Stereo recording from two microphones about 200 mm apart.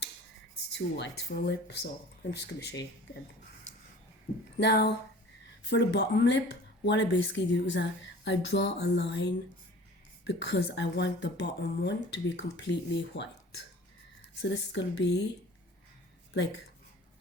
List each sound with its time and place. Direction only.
0.7 s speech: 60° left (ahead or behind)
4.5 s speech: 55° left (ahead or behind)
14.4 s speech: 60° left (ahead or behind)